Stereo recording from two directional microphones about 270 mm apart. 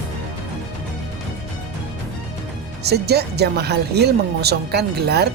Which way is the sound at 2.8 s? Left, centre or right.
Right.